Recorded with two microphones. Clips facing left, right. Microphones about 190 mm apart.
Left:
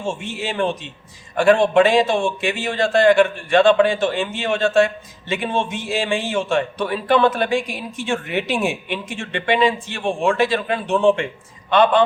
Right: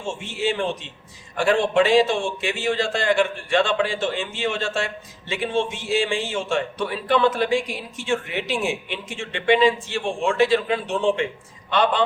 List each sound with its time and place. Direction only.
0.2 s a man's voice: 55° left (ahead or behind)